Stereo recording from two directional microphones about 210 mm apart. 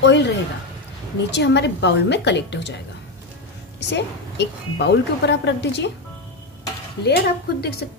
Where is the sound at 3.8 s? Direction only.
55° left (ahead or behind).